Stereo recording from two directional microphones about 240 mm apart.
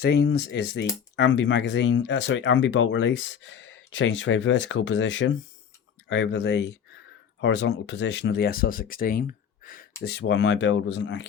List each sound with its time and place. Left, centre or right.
0.0 s speech: left